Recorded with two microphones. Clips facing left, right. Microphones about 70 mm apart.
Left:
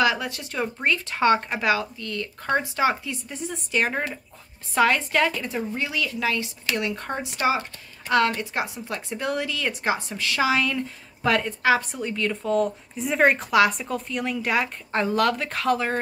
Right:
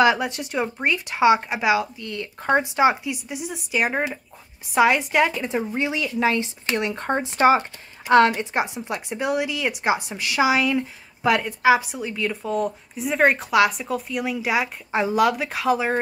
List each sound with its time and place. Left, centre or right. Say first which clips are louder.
0.0 s a woman's voice: right 4 dB; right